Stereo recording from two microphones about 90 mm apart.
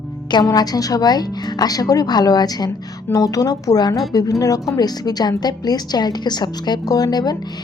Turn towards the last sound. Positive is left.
turn(degrees=50)  # may be behind; listen again after turning